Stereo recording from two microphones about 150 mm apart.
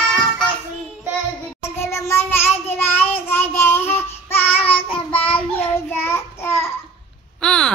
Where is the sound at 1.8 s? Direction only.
15° left (ahead or behind).